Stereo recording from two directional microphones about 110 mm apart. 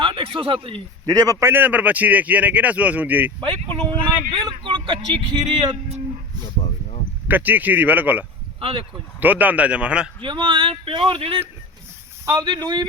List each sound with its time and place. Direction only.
0.0 s speech: 50° right (ahead or behind)
1.0 s a man's voice: 35° right (ahead or behind)
1.5 s speech: 15° right (ahead or behind)
3.8 s speech: 50° right (ahead or behind)
7.3 s speech: 15° right (ahead or behind)
8.6 s speech: 55° right (ahead or behind)
9.2 s speech: 15° right (ahead or behind)
10.2 s speech: 45° right (ahead or behind)
12.2 s speech: 30° right (ahead or behind)
12.5 s speech: 40° right (ahead or behind)